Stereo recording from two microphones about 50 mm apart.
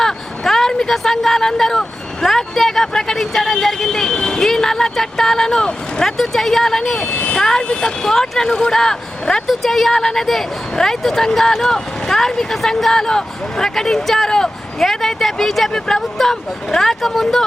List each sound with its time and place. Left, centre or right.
0.0 s vehicle: centre
2.2 s speech: centre
7.0 s speech: left
7.3 s speech: centre